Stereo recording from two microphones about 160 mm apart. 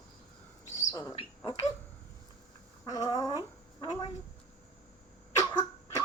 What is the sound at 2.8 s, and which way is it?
Speech, 20° left (ahead or behind).